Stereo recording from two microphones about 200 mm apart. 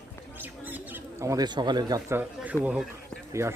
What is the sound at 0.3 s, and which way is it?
Speech, 10° right (ahead or behind).